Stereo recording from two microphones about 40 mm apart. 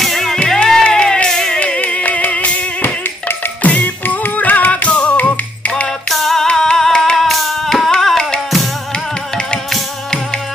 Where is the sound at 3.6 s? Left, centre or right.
Left.